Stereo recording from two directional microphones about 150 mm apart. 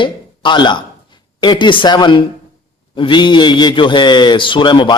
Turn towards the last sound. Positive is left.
turn(degrees=30)  # may be behind; listen again after turning